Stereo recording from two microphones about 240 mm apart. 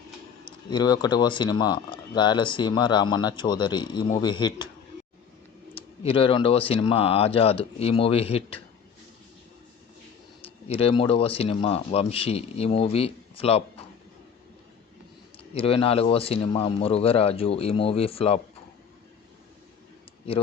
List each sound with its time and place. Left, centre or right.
0.4 s speech: centre
5.7 s speech: left
10.7 s speech: left
15.5 s speech: left